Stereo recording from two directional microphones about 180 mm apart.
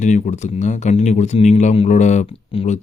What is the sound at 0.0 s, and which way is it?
Speech, 40° left (ahead or behind).